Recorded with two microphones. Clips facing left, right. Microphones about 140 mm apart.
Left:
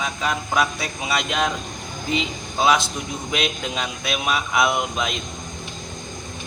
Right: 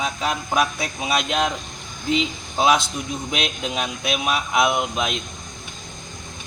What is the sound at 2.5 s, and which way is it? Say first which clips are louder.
Speech: right 1 dB; 15° right (ahead or behind).